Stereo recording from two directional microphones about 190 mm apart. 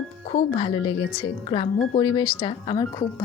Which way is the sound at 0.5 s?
25° left (ahead or behind).